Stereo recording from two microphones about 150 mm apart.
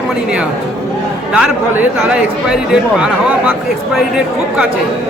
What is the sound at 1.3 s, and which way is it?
A man's voice, 5° right (ahead or behind).